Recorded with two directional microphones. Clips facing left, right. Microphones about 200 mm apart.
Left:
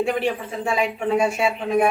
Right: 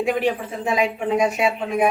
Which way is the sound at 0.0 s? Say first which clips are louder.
Right 1 dB; 15° right (ahead or behind).